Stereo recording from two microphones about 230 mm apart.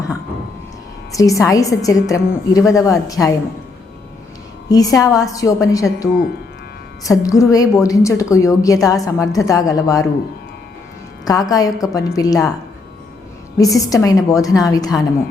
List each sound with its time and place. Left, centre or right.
1.1 s a woman's voice: centre
4.7 s a woman's voice: centre
11.3 s a woman's voice: centre
13.6 s a woman's voice: centre